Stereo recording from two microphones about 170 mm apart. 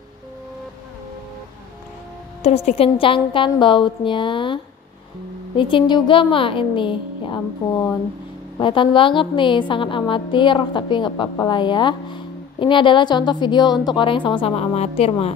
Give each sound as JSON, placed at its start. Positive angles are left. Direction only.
{"t": 2.4, "sound": "a woman's voice", "side_deg": 35}
{"t": 5.6, "sound": "a woman's voice", "side_deg": 30}
{"t": 8.5, "sound": "a woman's voice", "side_deg": 30}